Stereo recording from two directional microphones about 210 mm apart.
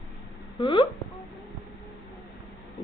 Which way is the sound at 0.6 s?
25° left (ahead or behind).